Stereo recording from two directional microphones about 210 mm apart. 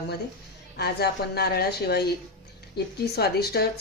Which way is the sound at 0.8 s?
50° left (ahead or behind).